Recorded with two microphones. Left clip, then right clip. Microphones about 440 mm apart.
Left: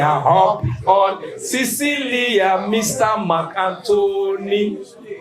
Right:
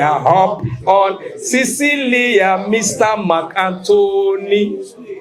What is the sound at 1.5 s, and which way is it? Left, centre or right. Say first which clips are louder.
Speech: right 5 dB; centre.